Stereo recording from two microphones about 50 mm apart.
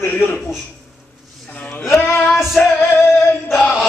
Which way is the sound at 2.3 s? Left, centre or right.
Centre.